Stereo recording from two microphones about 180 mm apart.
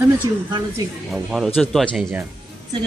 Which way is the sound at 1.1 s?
Centre (ahead or behind).